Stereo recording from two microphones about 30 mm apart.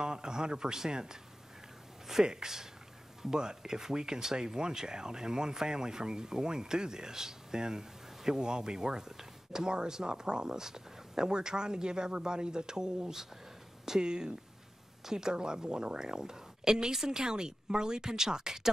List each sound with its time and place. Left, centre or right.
0.0 s speech: right
2.2 s speech: centre